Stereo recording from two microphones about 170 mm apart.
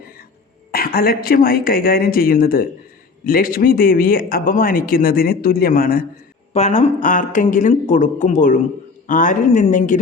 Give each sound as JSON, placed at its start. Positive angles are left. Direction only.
{"t": 0.7, "sound": "a man's voice", "side_deg": 60}
{"t": 6.5, "sound": "speech", "side_deg": 40}